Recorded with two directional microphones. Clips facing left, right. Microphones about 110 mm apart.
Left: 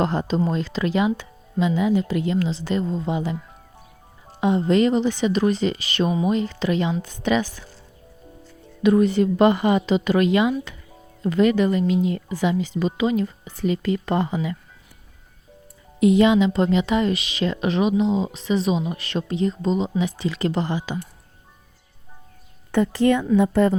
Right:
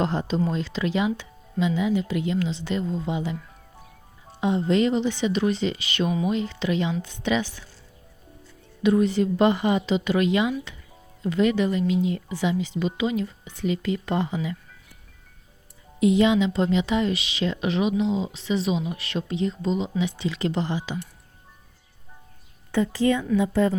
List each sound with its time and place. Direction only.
0.0 s speech: 50° left (ahead or behind)
4.4 s speech: 55° left (ahead or behind)
8.8 s speech: 55° left (ahead or behind)
16.0 s speech: 55° left (ahead or behind)
22.7 s a woman's voice: 60° left (ahead or behind)